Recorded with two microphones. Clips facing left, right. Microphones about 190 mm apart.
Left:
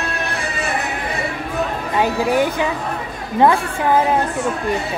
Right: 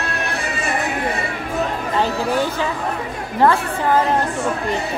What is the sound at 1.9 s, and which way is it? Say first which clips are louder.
Speech: left 3 dB; 15° left (ahead or behind).